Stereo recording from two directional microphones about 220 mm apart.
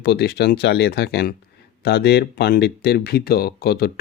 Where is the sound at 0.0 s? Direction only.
50° left (ahead or behind).